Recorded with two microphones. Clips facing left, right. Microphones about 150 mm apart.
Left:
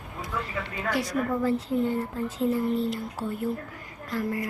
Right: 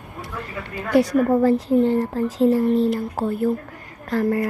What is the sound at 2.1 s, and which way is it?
Speech, 90° right.